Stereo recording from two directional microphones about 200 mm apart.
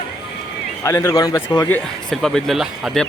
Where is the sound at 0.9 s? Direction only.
15° left (ahead or behind).